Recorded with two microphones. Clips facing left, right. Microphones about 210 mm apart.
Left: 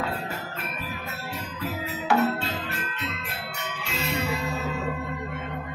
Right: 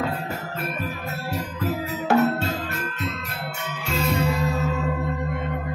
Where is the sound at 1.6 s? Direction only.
40° right (ahead or behind).